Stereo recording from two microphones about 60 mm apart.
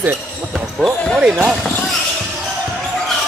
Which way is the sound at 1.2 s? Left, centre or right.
Centre.